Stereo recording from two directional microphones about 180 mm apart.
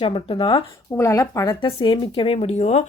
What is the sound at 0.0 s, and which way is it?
A woman's voice, 30° left (ahead or behind).